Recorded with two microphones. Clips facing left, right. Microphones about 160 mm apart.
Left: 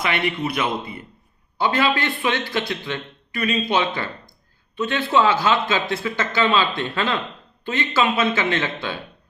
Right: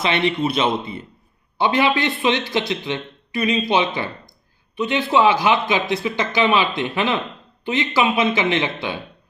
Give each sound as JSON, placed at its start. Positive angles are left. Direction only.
{"t": 0.0, "sound": "a man's voice", "side_deg": -25}